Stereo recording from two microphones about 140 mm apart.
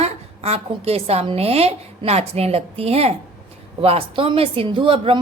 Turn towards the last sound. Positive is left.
turn(degrees=-40)  # may be behind; listen again after turning